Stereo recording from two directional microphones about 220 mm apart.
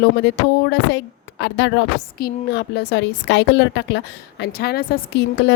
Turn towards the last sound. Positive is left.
turn(degrees=50)  # may be behind; listen again after turning